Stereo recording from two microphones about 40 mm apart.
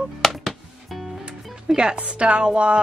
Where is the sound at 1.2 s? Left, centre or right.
Right.